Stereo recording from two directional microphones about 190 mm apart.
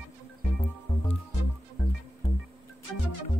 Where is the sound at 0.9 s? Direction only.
30° left (ahead or behind).